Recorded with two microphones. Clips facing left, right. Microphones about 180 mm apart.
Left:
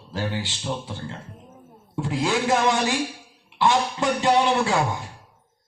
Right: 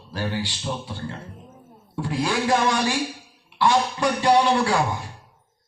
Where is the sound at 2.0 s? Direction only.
20° left (ahead or behind).